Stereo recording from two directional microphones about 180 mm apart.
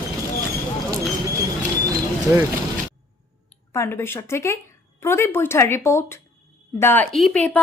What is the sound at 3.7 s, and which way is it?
Speech, 15° left (ahead or behind).